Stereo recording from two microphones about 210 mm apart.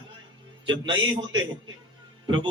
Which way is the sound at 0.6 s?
20° right (ahead or behind).